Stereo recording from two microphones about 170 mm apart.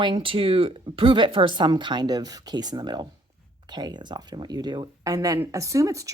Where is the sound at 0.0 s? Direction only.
30° right (ahead or behind).